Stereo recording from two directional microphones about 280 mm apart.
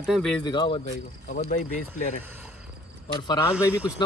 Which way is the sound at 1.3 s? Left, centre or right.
Left.